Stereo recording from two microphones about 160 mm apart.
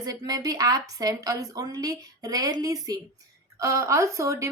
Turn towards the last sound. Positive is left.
turn(degrees=-20)  # may be behind; listen again after turning